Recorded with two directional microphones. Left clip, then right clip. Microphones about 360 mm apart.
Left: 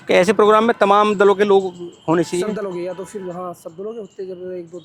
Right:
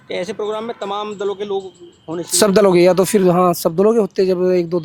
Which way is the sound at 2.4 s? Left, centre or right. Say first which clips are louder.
Right 13 dB; right.